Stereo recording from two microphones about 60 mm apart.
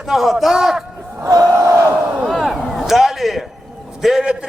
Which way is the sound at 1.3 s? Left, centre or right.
Right.